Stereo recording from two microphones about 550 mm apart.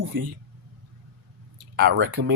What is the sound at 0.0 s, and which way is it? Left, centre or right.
Speech, right.